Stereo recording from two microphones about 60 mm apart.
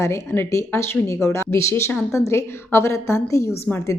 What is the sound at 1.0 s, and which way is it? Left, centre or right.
A woman's voice, left.